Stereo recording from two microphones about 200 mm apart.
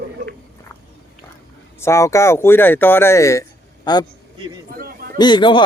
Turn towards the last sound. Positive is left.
turn(degrees=25)  # may be behind; listen again after turning